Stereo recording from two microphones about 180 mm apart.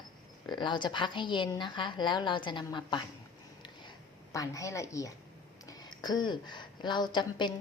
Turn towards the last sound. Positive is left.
turn(degrees=25)  # may be behind; listen again after turning